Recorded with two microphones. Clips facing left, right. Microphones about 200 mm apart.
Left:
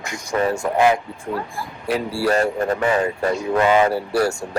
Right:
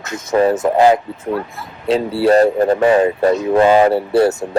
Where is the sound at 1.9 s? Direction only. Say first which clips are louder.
Right 7 dB; 25° right (ahead or behind).